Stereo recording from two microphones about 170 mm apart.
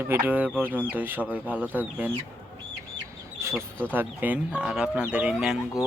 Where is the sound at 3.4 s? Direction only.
15° right (ahead or behind).